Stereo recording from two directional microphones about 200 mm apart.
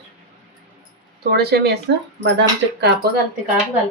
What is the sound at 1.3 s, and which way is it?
Speech, 55° right (ahead or behind).